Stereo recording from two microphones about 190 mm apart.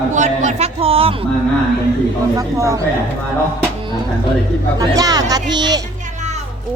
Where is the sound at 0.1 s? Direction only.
40° right (ahead or behind).